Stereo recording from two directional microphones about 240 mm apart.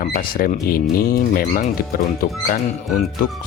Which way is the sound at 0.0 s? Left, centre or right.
Left.